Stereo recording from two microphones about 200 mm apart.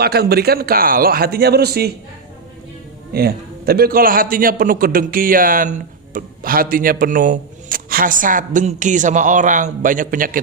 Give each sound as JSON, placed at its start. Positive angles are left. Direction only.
{"t": 0.0, "sound": "a man's voice", "side_deg": -50}
{"t": 3.1, "sound": "a man's voice", "side_deg": -50}